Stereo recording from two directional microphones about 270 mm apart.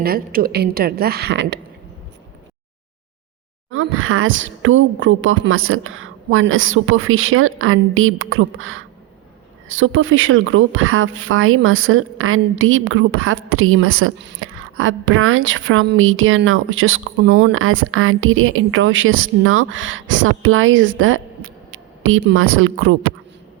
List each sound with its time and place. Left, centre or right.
0.0 s a woman's voice: right
3.7 s speech: right